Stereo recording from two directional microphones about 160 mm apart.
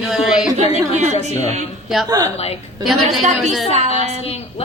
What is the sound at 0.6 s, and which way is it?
Speech, 45° right (ahead or behind).